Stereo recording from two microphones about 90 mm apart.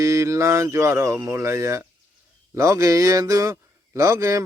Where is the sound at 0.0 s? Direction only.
35° right (ahead or behind).